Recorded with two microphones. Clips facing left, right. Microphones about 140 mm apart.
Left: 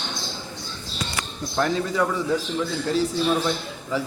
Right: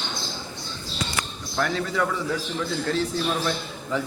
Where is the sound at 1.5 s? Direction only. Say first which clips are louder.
Left 2 dB; 20° left (ahead or behind).